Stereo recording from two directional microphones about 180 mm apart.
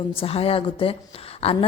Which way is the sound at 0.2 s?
35° left (ahead or behind).